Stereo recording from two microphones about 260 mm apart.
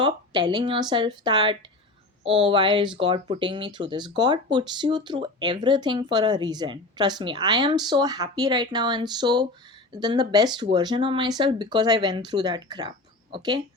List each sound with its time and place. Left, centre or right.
0.0 s speech: centre